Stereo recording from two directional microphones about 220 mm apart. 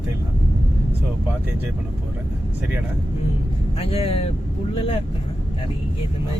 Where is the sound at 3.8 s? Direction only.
25° left (ahead or behind).